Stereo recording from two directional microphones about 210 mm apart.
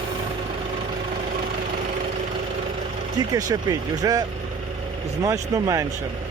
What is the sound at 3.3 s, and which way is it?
Speech, 15° right (ahead or behind).